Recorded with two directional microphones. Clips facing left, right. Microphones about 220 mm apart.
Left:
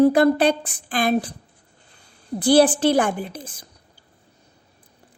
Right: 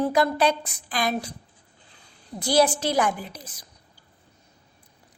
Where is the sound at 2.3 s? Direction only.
30° left (ahead or behind).